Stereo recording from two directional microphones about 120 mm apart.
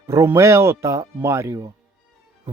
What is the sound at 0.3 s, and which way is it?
Speech, 25° right (ahead or behind).